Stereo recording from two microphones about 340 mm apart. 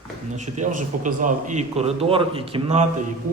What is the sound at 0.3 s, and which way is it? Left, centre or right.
A man's voice, right.